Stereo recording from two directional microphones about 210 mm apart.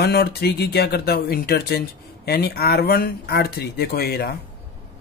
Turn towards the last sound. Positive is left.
turn(degrees=50)  # may be behind; listen again after turning